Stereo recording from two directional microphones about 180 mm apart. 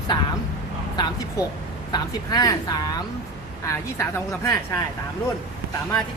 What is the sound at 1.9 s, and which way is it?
A woman's voice, 20° left (ahead or behind).